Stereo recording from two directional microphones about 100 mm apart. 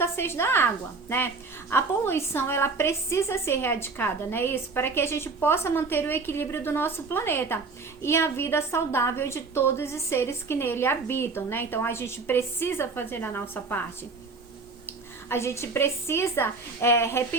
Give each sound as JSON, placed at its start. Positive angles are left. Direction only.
{"t": 0.0, "sound": "a woman's voice", "side_deg": 25}
{"t": 1.7, "sound": "a woman's voice", "side_deg": 25}
{"t": 14.8, "sound": "a woman's voice", "side_deg": 25}